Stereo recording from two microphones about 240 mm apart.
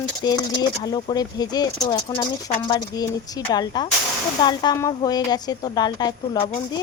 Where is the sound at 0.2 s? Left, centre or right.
Centre.